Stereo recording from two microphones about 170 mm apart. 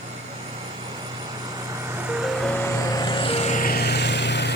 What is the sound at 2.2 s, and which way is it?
Vehicle, centre (ahead or behind).